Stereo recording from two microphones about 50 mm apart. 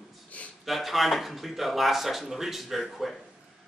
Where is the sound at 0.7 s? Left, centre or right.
Centre.